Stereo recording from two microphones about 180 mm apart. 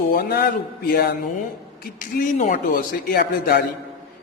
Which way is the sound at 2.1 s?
50° left (ahead or behind).